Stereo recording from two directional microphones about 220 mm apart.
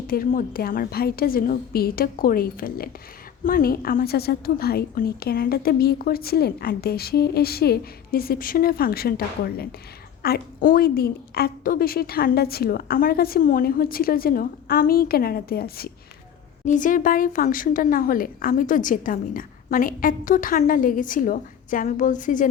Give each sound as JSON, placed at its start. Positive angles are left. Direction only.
{"t": 0.1, "sound": "a woman's voice", "side_deg": 40}